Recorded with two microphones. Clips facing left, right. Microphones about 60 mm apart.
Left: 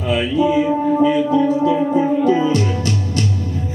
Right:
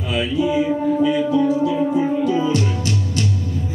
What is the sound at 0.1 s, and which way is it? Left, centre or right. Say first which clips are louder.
Music: left 3 dB; left.